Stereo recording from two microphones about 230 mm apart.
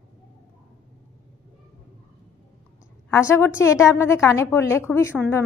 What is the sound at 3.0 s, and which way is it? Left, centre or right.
A woman's voice, centre.